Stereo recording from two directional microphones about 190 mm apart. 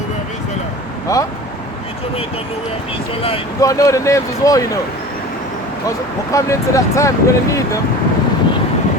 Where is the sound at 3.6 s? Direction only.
15° left (ahead or behind).